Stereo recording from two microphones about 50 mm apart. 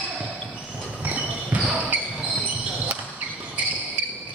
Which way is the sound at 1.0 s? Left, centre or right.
Right.